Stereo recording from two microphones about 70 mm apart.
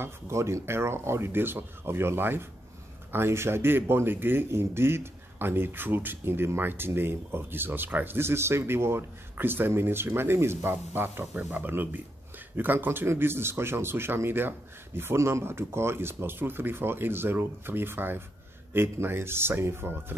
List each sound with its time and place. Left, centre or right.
0.0 s speech: right